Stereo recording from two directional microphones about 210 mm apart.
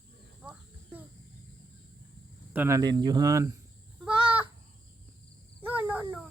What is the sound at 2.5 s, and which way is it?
Speech, 15° right (ahead or behind).